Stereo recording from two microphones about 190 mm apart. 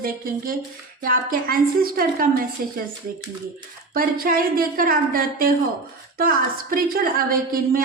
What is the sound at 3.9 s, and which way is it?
A woman's voice, 50° right (ahead or behind).